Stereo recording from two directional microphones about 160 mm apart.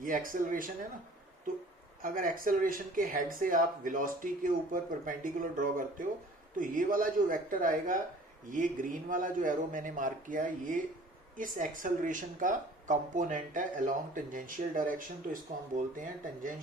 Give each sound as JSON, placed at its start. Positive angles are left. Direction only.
{"t": 0.0, "sound": "speech", "side_deg": -60}
{"t": 2.0, "sound": "speech", "side_deg": -60}